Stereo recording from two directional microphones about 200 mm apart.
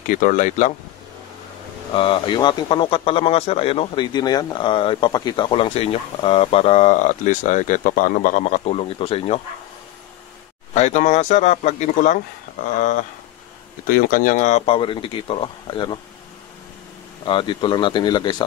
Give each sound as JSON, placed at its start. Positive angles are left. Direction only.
{"t": 0.2, "sound": "speech", "side_deg": 40}
{"t": 2.0, "sound": "a man's voice", "side_deg": 25}
{"t": 10.7, "sound": "speech", "side_deg": 35}
{"t": 13.8, "sound": "a man's voice", "side_deg": 45}
{"t": 17.2, "sound": "a man's voice", "side_deg": 25}